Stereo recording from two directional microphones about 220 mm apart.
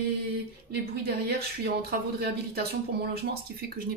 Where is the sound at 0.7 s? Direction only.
45° right (ahead or behind).